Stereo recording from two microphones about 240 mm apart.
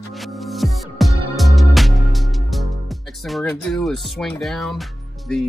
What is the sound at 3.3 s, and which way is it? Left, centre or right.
Speech, centre.